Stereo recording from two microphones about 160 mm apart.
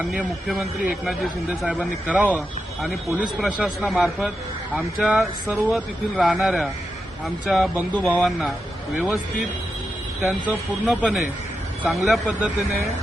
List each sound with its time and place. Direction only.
0.0 s speech: 5° right (ahead or behind)
10.2 s speech: centre (ahead or behind)